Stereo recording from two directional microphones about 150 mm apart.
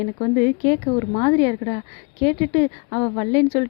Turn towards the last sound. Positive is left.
turn(degrees=25)  # may be behind; listen again after turning